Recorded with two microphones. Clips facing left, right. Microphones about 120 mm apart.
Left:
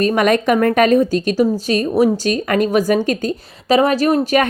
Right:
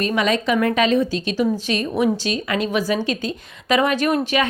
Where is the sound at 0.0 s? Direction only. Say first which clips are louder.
Left 6 dB; 50° left (ahead or behind).